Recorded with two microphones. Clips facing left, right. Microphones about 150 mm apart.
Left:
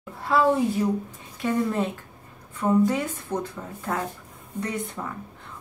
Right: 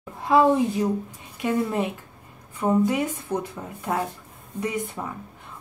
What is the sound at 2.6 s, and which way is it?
Speech, 15° right (ahead or behind).